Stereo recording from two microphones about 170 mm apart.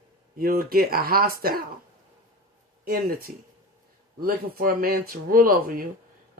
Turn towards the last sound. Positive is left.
turn(degrees=-55)  # may be behind; listen again after turning